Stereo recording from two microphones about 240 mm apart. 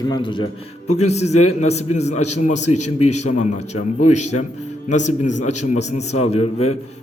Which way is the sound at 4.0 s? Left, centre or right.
Left.